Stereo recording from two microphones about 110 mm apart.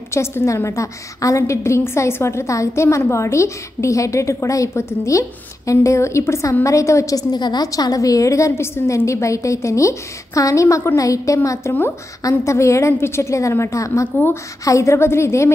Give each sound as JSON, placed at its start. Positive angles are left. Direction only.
{"t": 0.1, "sound": "a woman's voice", "side_deg": 25}